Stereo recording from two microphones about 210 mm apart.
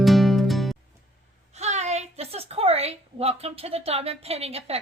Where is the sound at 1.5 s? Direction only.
30° right (ahead or behind).